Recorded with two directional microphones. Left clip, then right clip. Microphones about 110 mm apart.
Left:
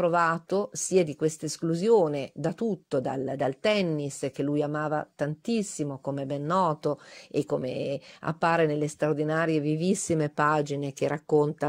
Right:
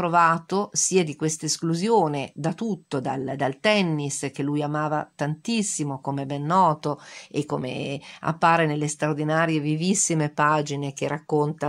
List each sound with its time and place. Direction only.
0.0 s speech: 35° left (ahead or behind)